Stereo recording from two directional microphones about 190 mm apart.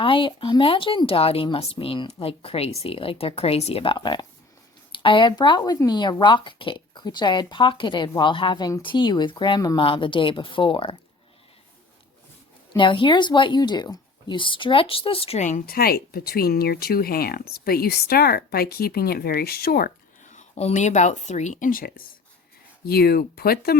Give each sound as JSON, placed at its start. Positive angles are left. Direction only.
{"t": 0.0, "sound": "speech", "side_deg": 25}
{"t": 12.7, "sound": "speech", "side_deg": 25}